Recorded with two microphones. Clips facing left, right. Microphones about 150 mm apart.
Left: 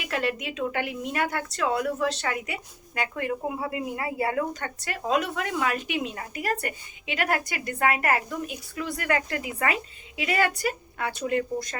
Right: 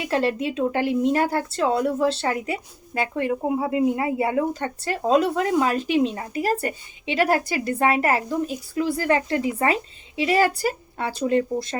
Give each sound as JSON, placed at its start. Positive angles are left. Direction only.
{"t": 0.0, "sound": "speech", "side_deg": -30}